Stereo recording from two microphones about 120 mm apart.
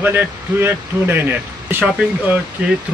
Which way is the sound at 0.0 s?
15° right (ahead or behind).